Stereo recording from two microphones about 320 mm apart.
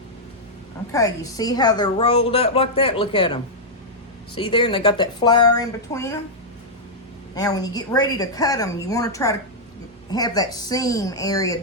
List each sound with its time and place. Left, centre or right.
0.9 s a woman's voice: centre
7.3 s a woman's voice: centre